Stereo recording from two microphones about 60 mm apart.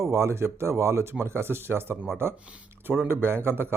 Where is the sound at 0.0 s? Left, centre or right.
Right.